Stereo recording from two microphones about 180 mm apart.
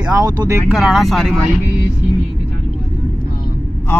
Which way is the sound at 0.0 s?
20° right (ahead or behind).